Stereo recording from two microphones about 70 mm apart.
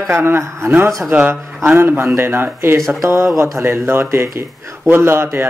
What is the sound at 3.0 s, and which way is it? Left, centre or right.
Speech, right.